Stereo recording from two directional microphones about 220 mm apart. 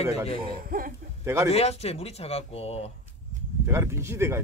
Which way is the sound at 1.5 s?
30° left (ahead or behind).